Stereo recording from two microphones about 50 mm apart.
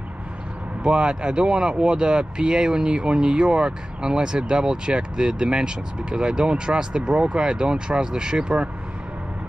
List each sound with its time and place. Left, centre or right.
0.8 s speech: centre